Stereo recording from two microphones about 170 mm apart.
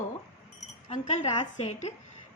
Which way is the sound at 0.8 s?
35° left (ahead or behind).